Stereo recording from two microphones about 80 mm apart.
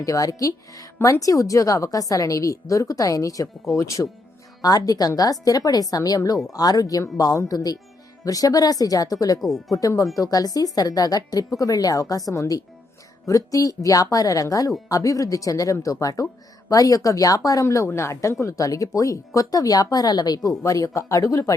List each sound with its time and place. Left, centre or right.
0.0 s a woman's voice: left
4.6 s a woman's voice: left
9.4 s speech: centre
9.7 s a woman's voice: left